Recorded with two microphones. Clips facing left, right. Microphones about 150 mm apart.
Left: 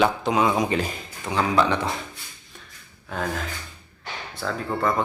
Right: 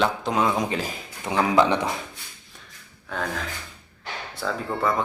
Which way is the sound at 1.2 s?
20° right (ahead or behind).